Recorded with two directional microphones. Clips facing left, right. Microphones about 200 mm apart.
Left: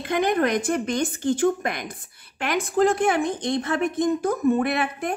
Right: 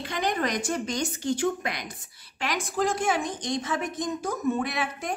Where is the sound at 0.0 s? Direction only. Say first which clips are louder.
Left 6 dB; 55° left (ahead or behind).